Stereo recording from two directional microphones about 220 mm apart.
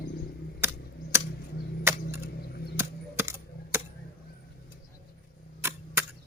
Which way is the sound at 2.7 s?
10° right (ahead or behind).